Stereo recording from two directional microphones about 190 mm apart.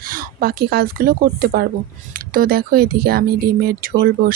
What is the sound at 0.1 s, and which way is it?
Speech, 50° right (ahead or behind).